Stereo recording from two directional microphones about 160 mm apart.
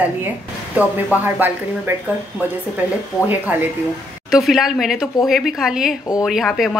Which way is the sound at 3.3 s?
10° right (ahead or behind).